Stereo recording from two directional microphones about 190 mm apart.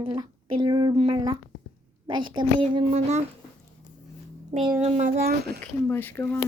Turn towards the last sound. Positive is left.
turn(degrees=10)  # may be behind; listen again after turning